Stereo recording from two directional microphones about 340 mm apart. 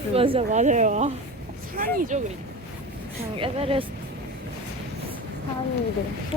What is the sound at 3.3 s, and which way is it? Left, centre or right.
Speech, centre.